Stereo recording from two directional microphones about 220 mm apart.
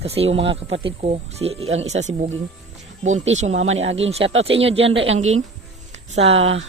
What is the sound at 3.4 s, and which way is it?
Speech, 30° right (ahead or behind).